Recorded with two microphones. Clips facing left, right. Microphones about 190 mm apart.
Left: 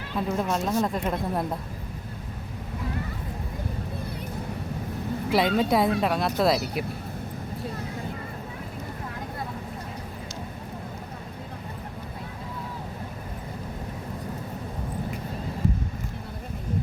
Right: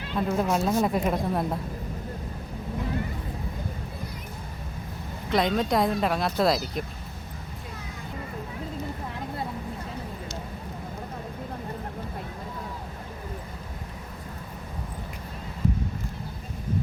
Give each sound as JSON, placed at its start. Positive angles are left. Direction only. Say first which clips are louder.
{"t": 0.2, "sound": "speech", "louder": "right 2 dB", "side_deg": 0}
{"t": 5.3, "sound": "speech", "louder": "left 1 dB", "side_deg": 5}